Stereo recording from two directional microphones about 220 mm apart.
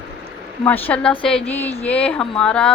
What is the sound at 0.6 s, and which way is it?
A woman's voice, 10° left (ahead or behind).